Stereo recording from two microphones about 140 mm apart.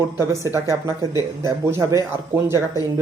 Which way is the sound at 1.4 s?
25° right (ahead or behind).